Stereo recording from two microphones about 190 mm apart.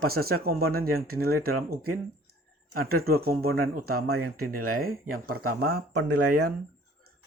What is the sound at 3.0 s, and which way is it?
Speech, 55° right (ahead or behind).